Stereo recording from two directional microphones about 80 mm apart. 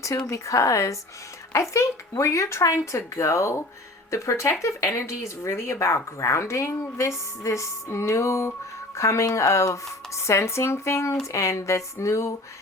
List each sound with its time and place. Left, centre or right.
0.3 s speech: left